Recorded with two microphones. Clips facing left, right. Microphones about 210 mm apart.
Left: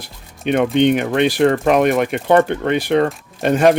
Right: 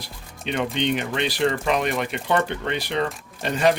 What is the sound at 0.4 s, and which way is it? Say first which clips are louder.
Speech: left 10 dB; 55° left (ahead or behind).